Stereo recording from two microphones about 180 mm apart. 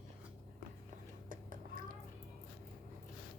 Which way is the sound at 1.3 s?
50° right (ahead or behind).